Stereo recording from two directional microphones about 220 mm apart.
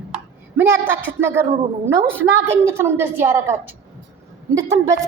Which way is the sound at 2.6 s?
10° right (ahead or behind).